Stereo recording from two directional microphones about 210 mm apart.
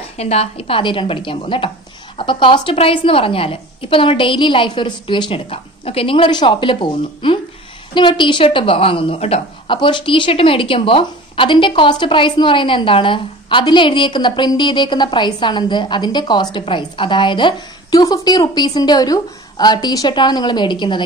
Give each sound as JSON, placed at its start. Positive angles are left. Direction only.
{"t": 0.2, "sound": "a woman's voice", "side_deg": 30}